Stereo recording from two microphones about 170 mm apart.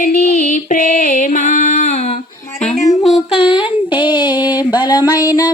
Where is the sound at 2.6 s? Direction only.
45° left (ahead or behind).